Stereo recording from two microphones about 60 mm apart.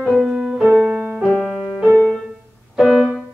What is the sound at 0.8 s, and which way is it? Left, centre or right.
Music, right.